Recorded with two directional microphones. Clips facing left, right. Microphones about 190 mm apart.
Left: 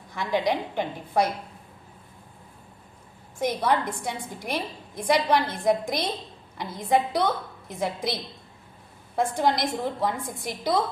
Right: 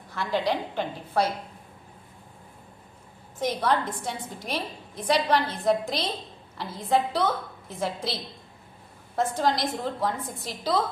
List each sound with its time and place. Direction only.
0.1 s a woman's voice: 15° left (ahead or behind)
3.3 s a woman's voice: 10° left (ahead or behind)
9.1 s a woman's voice: 10° left (ahead or behind)